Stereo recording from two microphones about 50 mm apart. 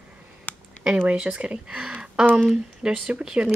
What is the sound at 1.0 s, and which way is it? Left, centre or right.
Speech, right.